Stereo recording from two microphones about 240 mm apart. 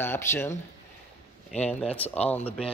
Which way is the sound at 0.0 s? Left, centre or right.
Centre.